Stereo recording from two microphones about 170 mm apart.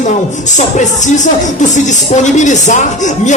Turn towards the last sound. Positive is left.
turn(degrees=45)  # may be behind; listen again after turning